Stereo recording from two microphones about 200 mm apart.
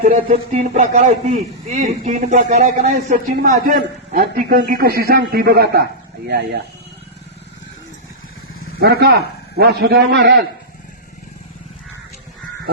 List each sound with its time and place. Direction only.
0.0 s a man's voice: 45° right (ahead or behind)
8.8 s a man's voice: 50° right (ahead or behind)